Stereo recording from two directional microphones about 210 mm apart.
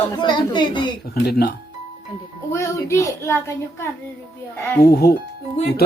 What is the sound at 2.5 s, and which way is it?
A woman's voice, 15° left (ahead or behind).